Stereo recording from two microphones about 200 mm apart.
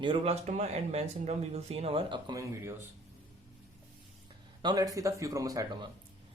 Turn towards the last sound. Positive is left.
turn(degrees=-20)  # may be behind; listen again after turning